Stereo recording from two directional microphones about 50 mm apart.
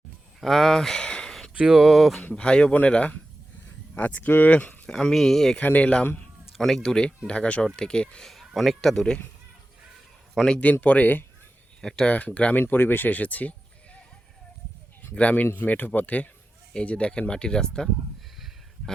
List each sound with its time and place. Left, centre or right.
0.3 s speech: centre
1.7 s speech: centre
2.3 s speech: centre
3.9 s speech: left
4.9 s speech: centre
5.5 s speech: left
6.6 s speech: centre
7.3 s speech: left
8.3 s speech: centre
10.6 s speech: left
11.8 s speech: centre
12.0 s speech: left
12.5 s speech: left
15.1 s speech: left